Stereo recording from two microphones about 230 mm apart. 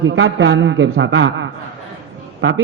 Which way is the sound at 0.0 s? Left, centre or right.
Right.